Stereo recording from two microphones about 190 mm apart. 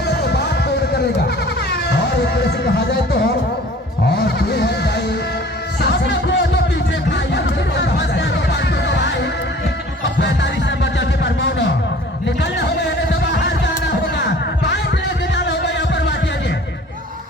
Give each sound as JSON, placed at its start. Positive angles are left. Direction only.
{"t": 0.1, "sound": "music", "side_deg": 60}
{"t": 1.7, "sound": "music", "side_deg": 60}
{"t": 4.4, "sound": "music", "side_deg": 60}
{"t": 7.1, "sound": "chatter", "side_deg": 65}
{"t": 8.1, "sound": "music", "side_deg": 60}